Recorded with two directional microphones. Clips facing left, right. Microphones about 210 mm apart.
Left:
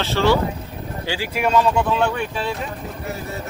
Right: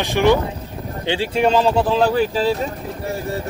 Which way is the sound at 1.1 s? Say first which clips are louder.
Right 4 dB; 25° right (ahead or behind).